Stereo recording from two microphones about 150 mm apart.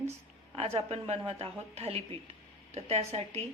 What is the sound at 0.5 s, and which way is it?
A woman's voice, 40° right (ahead or behind).